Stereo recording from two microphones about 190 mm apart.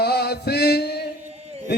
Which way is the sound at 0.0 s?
60° left (ahead or behind).